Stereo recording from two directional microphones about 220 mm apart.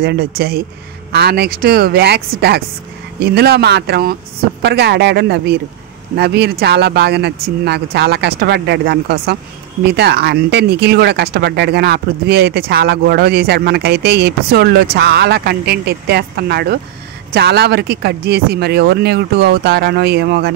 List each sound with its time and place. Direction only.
0.0 s speech: 45° right (ahead or behind)